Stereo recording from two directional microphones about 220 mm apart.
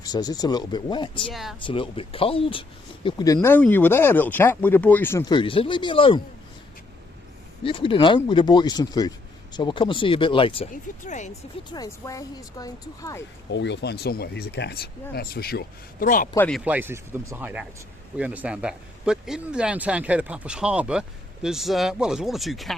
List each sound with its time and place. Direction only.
0.0 s speech: 15° left (ahead or behind)
1.3 s speech: centre (ahead or behind)
1.6 s speech: 25° left (ahead or behind)
7.6 s speech: 25° left (ahead or behind)
11.7 s speech: 15° left (ahead or behind)
13.5 s speech: 50° left (ahead or behind); by 16.3 s 35° left (ahead or behind)
16.3 s speech: 5° left (ahead or behind)
16.6 s speech: 10° right (ahead or behind)